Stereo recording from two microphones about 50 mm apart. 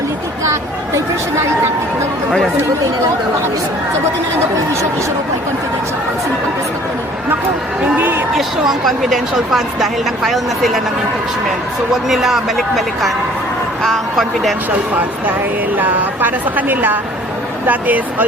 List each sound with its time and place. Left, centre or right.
7.9 s a woman's voice: right
8.4 s speech: centre
12.0 s speech: centre
14.7 s a woman's voice: right